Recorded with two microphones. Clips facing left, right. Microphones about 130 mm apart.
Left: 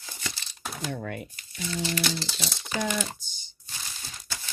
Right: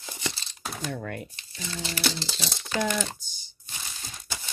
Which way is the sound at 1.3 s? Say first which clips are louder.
Left 3 dB; 30° right (ahead or behind).